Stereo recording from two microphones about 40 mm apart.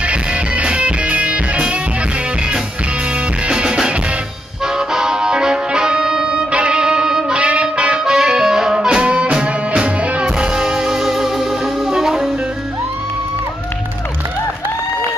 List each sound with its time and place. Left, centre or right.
0.0 s music: right
3.4 s music: right
10.2 s music: centre